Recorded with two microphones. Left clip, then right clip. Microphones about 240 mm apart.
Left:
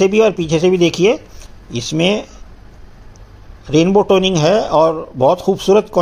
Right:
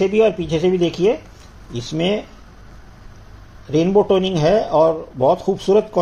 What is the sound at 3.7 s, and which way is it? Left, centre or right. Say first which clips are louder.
Speech: left 3 dB; left.